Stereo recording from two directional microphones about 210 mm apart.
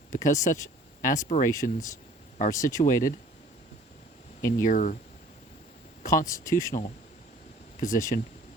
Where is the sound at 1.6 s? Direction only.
35° left (ahead or behind).